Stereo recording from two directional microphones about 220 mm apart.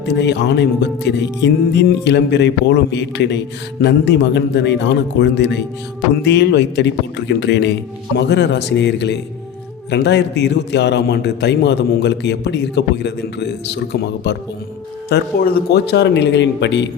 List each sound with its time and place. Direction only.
0.0 s speech: 50° left (ahead or behind)